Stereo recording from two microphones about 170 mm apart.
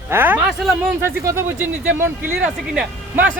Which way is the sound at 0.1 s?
10° right (ahead or behind).